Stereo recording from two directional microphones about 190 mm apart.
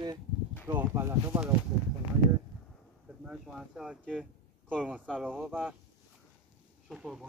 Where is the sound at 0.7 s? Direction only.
10° right (ahead or behind).